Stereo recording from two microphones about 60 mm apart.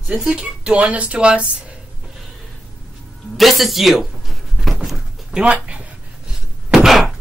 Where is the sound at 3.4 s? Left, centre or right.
Centre.